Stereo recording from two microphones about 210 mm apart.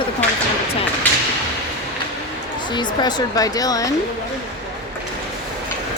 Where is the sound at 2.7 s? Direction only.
20° left (ahead or behind).